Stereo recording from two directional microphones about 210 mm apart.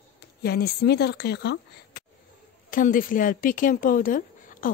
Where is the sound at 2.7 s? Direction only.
40° left (ahead or behind).